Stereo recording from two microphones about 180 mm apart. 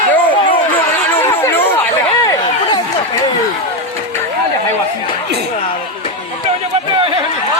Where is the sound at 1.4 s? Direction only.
10° left (ahead or behind).